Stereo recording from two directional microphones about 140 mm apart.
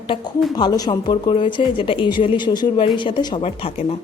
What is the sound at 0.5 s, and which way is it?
Speech, 30° left (ahead or behind).